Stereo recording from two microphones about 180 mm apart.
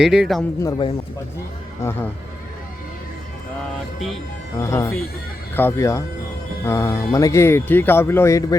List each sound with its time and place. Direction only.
0.0 s a man's voice: centre (ahead or behind)
0.6 s speech: 20° left (ahead or behind)
4.5 s speech: 15° left (ahead or behind)